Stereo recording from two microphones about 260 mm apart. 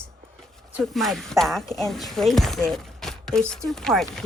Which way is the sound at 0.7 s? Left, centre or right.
Centre.